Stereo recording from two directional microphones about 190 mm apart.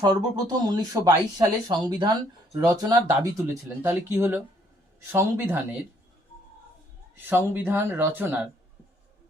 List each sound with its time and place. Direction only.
0.0 s speech: 20° right (ahead or behind)
7.3 s speech: 10° right (ahead or behind)